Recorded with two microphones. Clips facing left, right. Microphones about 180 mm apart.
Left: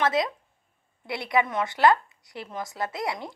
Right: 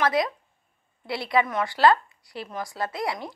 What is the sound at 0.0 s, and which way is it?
A woman's voice, 25° left (ahead or behind).